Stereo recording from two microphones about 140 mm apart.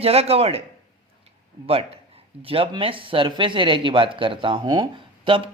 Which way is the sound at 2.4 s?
40° right (ahead or behind).